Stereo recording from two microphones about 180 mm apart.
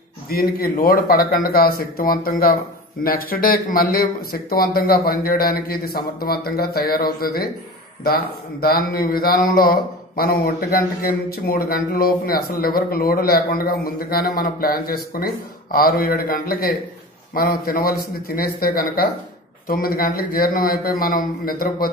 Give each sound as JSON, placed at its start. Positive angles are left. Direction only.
{"t": 0.3, "sound": "a man's voice", "side_deg": 55}